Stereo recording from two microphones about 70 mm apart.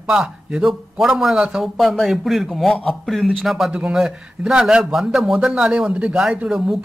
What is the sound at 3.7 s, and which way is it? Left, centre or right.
Speech, centre.